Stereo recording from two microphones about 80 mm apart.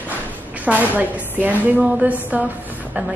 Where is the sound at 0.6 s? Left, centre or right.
Centre.